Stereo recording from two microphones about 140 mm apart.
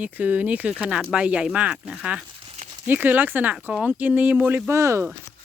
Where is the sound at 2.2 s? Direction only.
45° right (ahead or behind).